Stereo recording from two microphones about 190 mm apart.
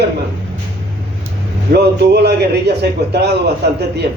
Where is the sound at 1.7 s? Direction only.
60° right (ahead or behind).